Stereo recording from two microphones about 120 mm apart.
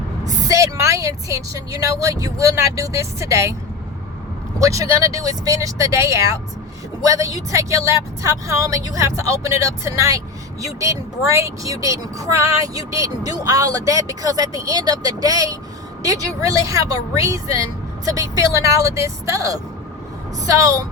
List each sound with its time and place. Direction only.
0.4 s speech: 25° right (ahead or behind)
4.6 s speech: 25° right (ahead or behind)